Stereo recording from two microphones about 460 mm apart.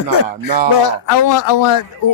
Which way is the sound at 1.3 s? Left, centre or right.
Left.